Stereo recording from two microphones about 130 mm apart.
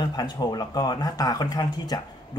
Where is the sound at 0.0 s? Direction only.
30° left (ahead or behind).